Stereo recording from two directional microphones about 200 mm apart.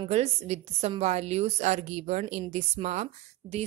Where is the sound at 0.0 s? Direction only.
30° right (ahead or behind).